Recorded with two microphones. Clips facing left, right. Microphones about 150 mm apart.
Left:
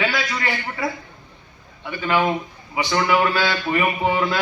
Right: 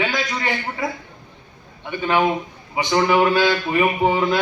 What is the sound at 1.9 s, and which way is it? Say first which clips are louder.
A man's voice: right 1 dB; 20° right (ahead or behind).